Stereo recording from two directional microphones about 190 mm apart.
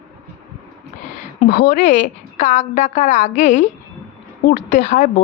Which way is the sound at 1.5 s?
45° left (ahead or behind).